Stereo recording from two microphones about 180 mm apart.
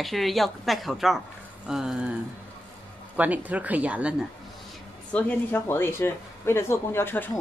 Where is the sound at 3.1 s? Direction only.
10° right (ahead or behind).